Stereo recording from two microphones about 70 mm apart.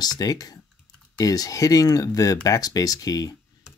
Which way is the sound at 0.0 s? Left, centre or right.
Left.